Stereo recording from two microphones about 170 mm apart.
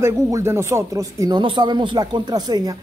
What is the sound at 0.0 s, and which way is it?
Speech, 15° right (ahead or behind).